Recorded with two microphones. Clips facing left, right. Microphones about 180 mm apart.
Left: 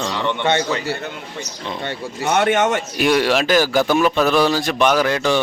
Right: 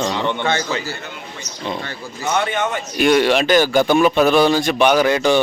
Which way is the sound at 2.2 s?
65° left (ahead or behind).